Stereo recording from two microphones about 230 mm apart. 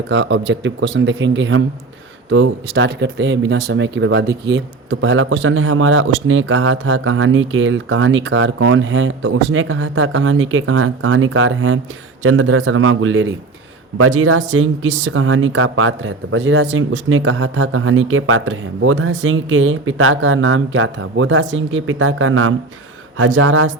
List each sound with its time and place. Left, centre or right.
0.1 s speech: right
14.0 s speech: right